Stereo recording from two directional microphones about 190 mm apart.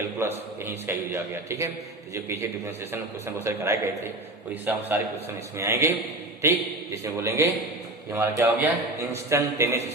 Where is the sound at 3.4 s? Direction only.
15° right (ahead or behind).